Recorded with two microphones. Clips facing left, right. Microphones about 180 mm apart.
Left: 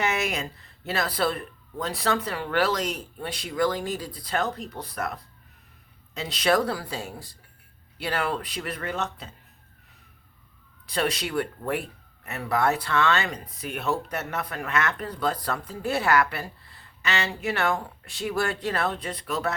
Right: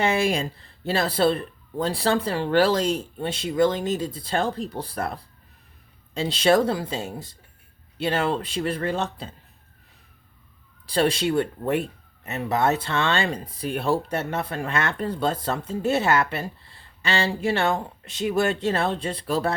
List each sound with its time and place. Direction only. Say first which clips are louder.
0.0 s speech: right 5 dB; 30° right (ahead or behind)
10.8 s speech: right 6 dB; 30° right (ahead or behind)